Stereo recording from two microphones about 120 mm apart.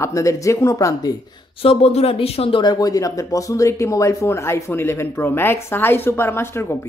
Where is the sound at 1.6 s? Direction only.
55° left (ahead or behind).